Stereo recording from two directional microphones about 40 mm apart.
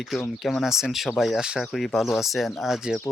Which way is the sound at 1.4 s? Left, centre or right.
Centre.